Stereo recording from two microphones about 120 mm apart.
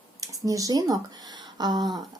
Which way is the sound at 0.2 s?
30° right (ahead or behind).